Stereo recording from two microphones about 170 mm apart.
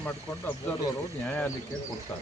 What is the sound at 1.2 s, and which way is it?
Speech, 5° left (ahead or behind).